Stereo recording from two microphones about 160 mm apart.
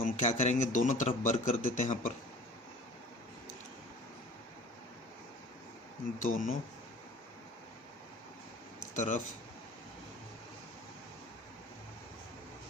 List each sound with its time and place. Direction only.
0.0 s speech: 50° left (ahead or behind)
6.2 s speech: 55° left (ahead or behind)
9.0 s speech: 50° left (ahead or behind)